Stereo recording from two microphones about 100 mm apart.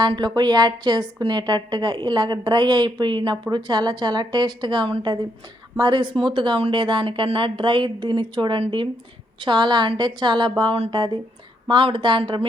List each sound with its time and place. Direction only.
0.0 s a woman's voice: 45° right (ahead or behind)